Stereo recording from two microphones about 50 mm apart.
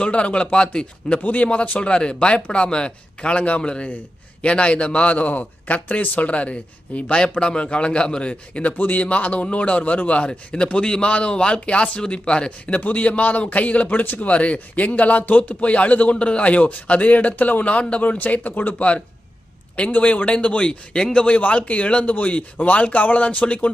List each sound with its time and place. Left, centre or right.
0.0 s speech: left
1.2 s speech: left
14.3 s speech: left
19.7 s speech: left